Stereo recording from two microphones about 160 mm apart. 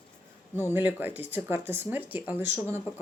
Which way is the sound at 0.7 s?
10° right (ahead or behind).